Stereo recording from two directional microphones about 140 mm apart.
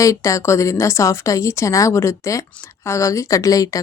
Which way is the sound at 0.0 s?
20° left (ahead or behind).